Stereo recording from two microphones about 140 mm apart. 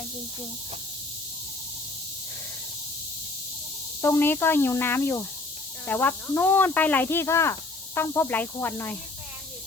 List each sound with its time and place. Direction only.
4.0 s speech: 20° left (ahead or behind)